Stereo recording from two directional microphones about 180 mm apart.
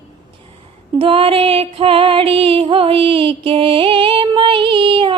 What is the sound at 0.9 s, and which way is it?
Female singing, 30° right (ahead or behind).